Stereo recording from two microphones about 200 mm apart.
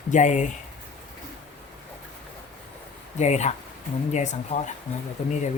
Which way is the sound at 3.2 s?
35° left (ahead or behind).